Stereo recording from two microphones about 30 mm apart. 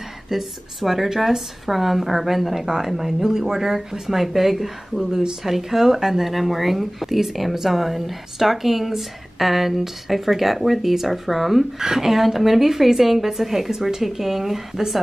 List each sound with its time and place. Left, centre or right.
0.3 s a woman's voice: centre
11.8 s a woman's voice: centre
12.1 s a woman's voice: centre